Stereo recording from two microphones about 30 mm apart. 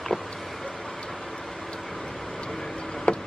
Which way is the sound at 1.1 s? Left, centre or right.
Centre.